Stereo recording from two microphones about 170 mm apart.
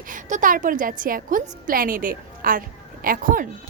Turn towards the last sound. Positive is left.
turn(degrees=-55)  # may be behind; listen again after turning